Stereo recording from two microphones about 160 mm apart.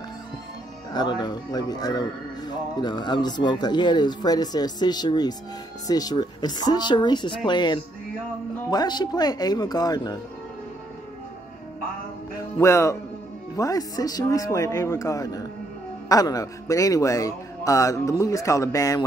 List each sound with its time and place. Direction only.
0.9 s a man's voice: 25° left (ahead or behind)
12.5 s a man's voice: 20° left (ahead or behind)